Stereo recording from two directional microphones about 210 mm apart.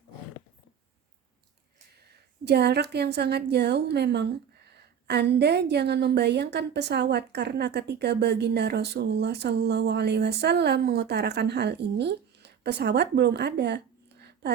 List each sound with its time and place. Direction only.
2.4 s a woman's voice: 50° right (ahead or behind)